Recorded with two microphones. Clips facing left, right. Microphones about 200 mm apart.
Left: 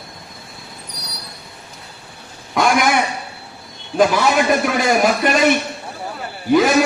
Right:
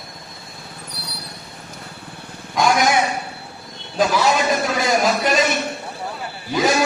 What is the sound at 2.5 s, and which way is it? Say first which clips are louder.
Speech: left 1 dB; 60° left (ahead or behind).